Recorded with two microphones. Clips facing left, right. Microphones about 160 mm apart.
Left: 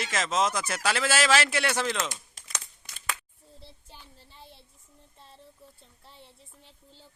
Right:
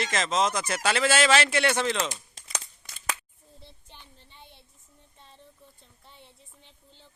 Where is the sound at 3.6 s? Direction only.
5° left (ahead or behind).